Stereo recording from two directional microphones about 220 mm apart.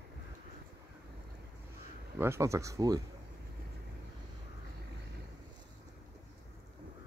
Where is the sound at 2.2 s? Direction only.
10° right (ahead or behind).